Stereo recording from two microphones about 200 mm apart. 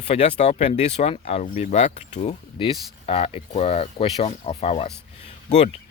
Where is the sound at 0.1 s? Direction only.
30° left (ahead or behind).